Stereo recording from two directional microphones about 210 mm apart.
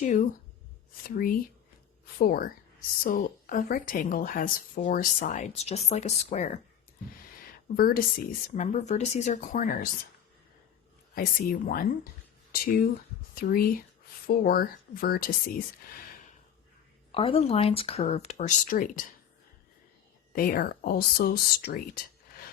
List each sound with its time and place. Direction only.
0.0 s a woman's voice: 35° left (ahead or behind)
7.8 s a woman's voice: 45° left (ahead or behind)
11.1 s speech: 45° left (ahead or behind)
17.1 s speech: 25° left (ahead or behind)
20.3 s speech: 45° left (ahead or behind)